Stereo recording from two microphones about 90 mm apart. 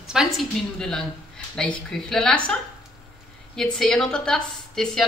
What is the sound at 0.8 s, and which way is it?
Speech, 5° left (ahead or behind).